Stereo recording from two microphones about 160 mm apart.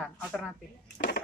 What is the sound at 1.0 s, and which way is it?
Speech, 65° left (ahead or behind).